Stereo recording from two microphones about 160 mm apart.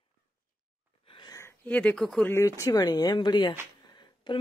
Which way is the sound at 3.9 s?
30° left (ahead or behind).